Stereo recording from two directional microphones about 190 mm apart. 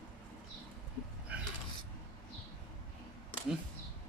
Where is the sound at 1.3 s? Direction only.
5° right (ahead or behind).